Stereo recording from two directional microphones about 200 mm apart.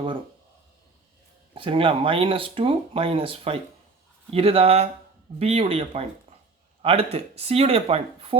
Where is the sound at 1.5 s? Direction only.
25° right (ahead or behind).